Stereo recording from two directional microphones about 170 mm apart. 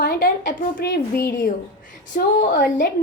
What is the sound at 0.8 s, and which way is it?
Speech, 75° left (ahead or behind).